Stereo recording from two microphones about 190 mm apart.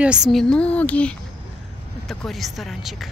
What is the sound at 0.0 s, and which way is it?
Speech, 5° right (ahead or behind).